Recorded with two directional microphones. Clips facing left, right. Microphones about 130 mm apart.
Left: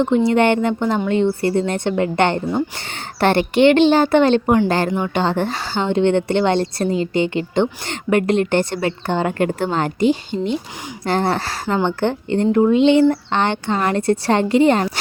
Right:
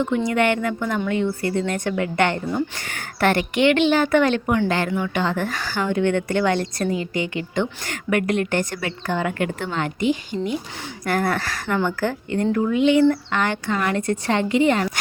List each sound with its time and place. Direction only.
0.3 s a woman's voice: 30° left (ahead or behind)